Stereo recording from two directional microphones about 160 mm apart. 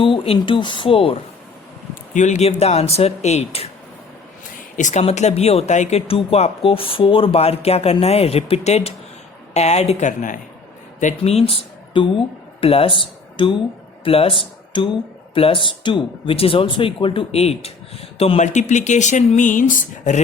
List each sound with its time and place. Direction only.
0.0 s speech: 35° left (ahead or behind)
2.1 s speech: 50° left (ahead or behind)
4.8 s speech: 50° left (ahead or behind)
11.2 s speech: 40° left (ahead or behind)